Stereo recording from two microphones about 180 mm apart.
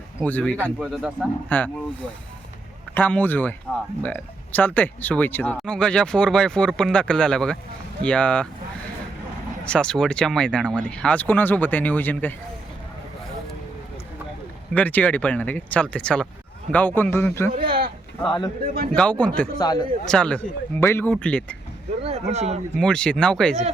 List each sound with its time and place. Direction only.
0.2 s speech: 10° left (ahead or behind)
0.5 s speech: 5° right (ahead or behind)
9.6 s speech: 5° left (ahead or behind)
14.7 s speech: 10° left (ahead or behind)
17.5 s a sound: 55° right (ahead or behind)
18.2 s speech: 20° left (ahead or behind)
18.6 s speech: 55° right (ahead or behind)
18.9 s speech: 5° left (ahead or behind)
19.5 s speech: 20° left (ahead or behind)
20.1 s speech: 5° left (ahead or behind)
22.0 s speech: 35° right (ahead or behind)
22.8 s speech: 5° left (ahead or behind)